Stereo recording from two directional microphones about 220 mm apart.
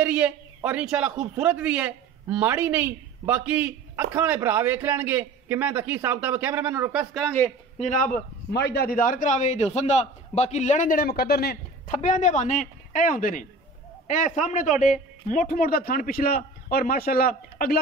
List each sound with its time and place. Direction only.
0.0 s a man's voice: 5° right (ahead or behind)
7.8 s a man's voice: 35° left (ahead or behind)
8.5 s a man's voice: 50° left (ahead or behind)